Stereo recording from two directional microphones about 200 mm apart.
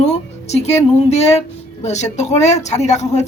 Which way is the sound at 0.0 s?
35° left (ahead or behind).